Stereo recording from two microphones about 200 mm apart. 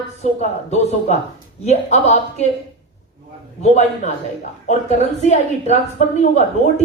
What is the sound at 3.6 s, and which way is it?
Speech, 35° left (ahead or behind).